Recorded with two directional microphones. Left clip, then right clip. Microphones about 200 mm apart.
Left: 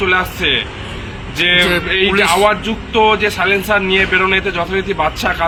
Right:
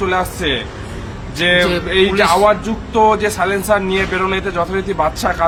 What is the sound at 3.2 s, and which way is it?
A man's voice, centre (ahead or behind).